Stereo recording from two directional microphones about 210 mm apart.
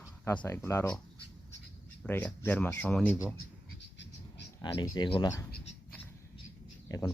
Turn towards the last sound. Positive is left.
turn(degrees=15)  # may be behind; listen again after turning